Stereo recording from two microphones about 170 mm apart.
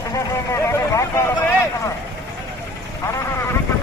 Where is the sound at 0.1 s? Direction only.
15° left (ahead or behind).